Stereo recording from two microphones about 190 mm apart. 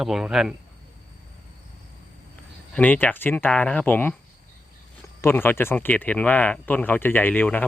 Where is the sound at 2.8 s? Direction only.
10° left (ahead or behind).